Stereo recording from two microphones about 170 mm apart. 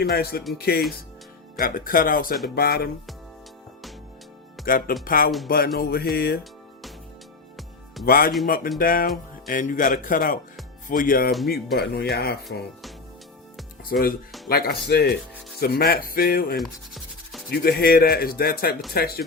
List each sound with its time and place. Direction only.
0.0 s speech: 65° left (ahead or behind)
1.5 s speech: 55° left (ahead or behind)
4.6 s speech: 55° left (ahead or behind)
8.0 s speech: 60° left (ahead or behind)
13.8 s speech: 60° left (ahead or behind)
16.6 s rub: centre (ahead or behind)
17.5 s speech: 65° left (ahead or behind)